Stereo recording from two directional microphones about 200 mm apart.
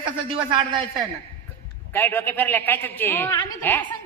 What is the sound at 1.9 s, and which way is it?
Speech, 10° left (ahead or behind).